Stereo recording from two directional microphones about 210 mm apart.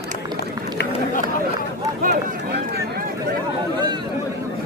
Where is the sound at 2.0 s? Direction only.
50° right (ahead or behind).